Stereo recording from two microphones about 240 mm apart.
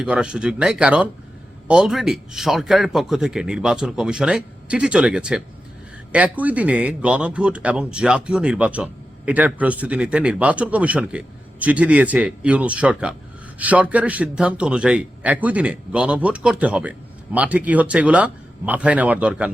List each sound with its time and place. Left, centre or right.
0.0 s speech: centre